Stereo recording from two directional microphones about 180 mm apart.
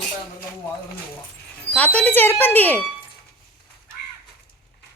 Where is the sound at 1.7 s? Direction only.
10° left (ahead or behind).